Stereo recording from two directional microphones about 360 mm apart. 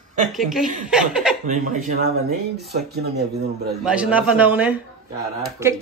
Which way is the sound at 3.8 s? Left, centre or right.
Centre.